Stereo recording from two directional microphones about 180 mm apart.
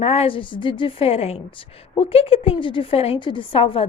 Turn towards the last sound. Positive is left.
turn(degrees=30)  # may be behind; listen again after turning